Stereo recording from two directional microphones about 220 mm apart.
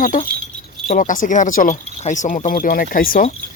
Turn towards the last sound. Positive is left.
turn(degrees=40)  # may be behind; listen again after turning